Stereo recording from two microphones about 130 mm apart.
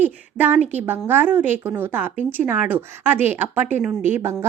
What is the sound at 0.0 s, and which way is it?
A woman's voice, 15° right (ahead or behind).